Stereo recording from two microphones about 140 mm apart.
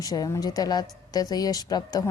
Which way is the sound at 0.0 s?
25° left (ahead or behind).